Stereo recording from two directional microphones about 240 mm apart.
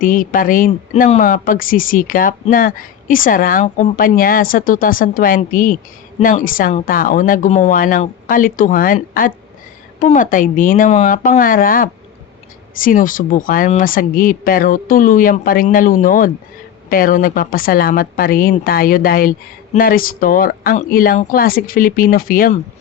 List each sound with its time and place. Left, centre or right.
0.0 s speech: left